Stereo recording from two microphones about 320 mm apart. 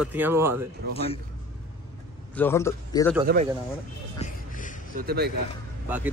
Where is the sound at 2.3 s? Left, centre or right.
Centre.